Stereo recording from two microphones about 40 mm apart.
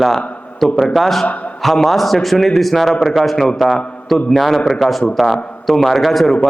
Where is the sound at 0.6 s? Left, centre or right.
Centre.